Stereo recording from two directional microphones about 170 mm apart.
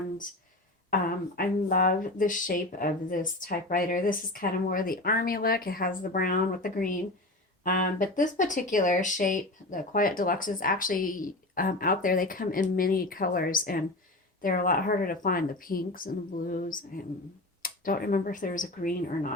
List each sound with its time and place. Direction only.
1.4 s speech: 60° left (ahead or behind)